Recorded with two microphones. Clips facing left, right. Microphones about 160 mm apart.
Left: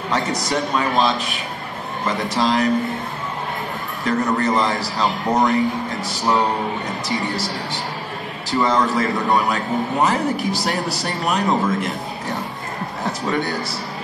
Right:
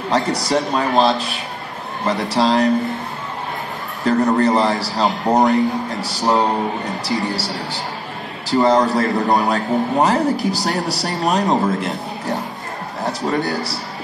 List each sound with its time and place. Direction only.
0.1 s a man's voice: 30° right (ahead or behind)
4.0 s a man's voice: 30° right (ahead or behind)